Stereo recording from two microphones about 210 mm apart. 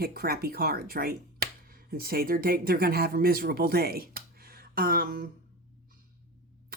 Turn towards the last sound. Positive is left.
turn(degrees=-45)  # may be behind; listen again after turning